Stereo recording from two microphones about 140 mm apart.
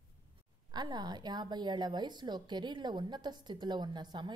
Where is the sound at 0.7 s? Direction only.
30° right (ahead or behind).